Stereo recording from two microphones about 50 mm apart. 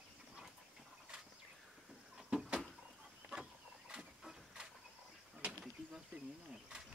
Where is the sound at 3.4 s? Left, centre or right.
Centre.